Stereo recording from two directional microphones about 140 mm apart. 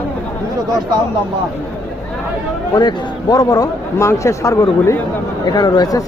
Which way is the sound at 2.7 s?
30° left (ahead or behind).